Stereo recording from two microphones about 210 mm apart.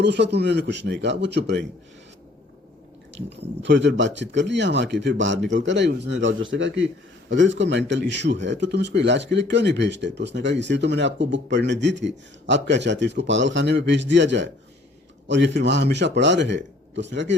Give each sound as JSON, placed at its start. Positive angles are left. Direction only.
{"t": 0.0, "sound": "speech", "side_deg": -55}
{"t": 3.2, "sound": "speech", "side_deg": -55}